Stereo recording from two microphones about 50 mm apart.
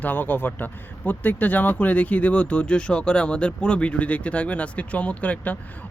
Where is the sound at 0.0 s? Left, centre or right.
Left.